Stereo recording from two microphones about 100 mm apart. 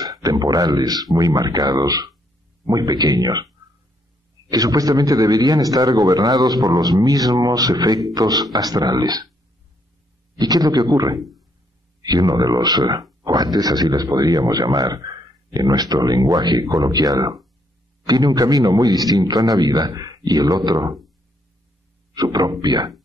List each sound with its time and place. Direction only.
0.2 s speech: 40° right (ahead or behind)
4.5 s speech: 40° right (ahead or behind)
10.4 s speech: 40° right (ahead or behind)
22.1 s speech: 40° right (ahead or behind)